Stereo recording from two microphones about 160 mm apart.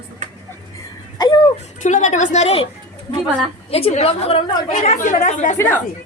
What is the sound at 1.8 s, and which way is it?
Speech, 50° left (ahead or behind).